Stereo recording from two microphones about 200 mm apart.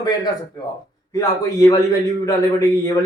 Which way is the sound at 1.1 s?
15° left (ahead or behind).